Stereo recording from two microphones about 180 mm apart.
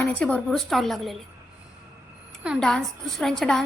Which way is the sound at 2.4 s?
Centre (ahead or behind).